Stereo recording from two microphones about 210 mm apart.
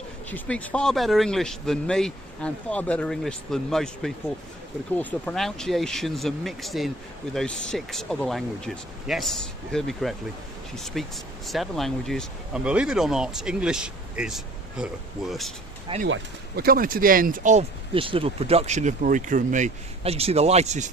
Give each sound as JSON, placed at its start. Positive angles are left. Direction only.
{"t": 0.3, "sound": "speech", "side_deg": 5}
{"t": 15.9, "sound": "speech", "side_deg": -20}
{"t": 16.6, "sound": "speech", "side_deg": -45}